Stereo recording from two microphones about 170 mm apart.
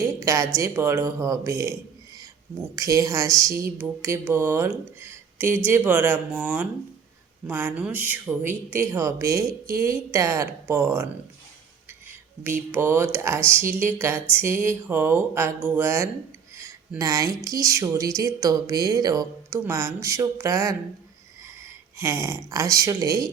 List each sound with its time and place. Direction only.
0.0 s speech: 15° right (ahead or behind)
2.7 s speech: 20° right (ahead or behind)
11.9 s music: 10° right (ahead or behind)
13.1 s a woman's voice: 15° right (ahead or behind)